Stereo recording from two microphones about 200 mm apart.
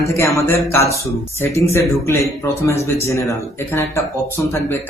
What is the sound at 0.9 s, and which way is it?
A man's voice, 15° left (ahead or behind).